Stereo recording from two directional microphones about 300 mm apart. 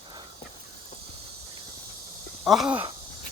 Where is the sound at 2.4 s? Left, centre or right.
Centre.